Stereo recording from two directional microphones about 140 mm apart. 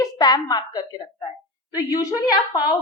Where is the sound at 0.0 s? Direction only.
30° left (ahead or behind).